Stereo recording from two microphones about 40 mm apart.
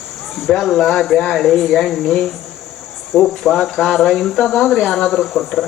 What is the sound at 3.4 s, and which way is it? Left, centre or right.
Speech, centre.